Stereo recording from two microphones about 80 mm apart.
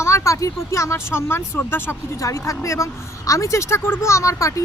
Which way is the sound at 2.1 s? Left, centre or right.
Left.